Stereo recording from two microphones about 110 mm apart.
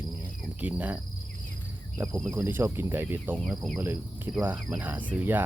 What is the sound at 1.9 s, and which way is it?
Speech, 25° right (ahead or behind).